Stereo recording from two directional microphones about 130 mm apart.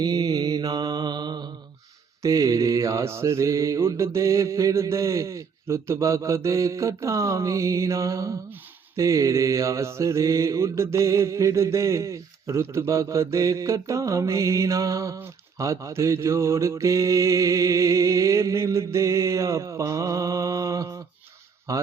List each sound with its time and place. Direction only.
0.0 s mantra: 30° right (ahead or behind)